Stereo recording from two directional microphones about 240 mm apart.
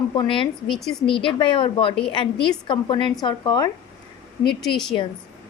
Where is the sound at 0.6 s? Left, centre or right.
Centre.